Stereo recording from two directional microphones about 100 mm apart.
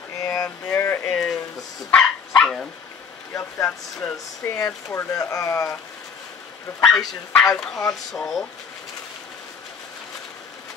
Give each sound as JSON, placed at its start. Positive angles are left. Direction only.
{"t": 0.2, "sound": "a sound", "side_deg": 30}
{"t": 1.9, "sound": "dog", "side_deg": 5}
{"t": 3.3, "sound": "speech", "side_deg": 20}
{"t": 4.6, "sound": "speech", "side_deg": 30}
{"t": 6.8, "sound": "speech", "side_deg": 0}